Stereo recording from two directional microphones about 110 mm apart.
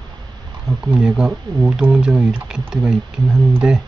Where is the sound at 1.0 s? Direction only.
5° right (ahead or behind).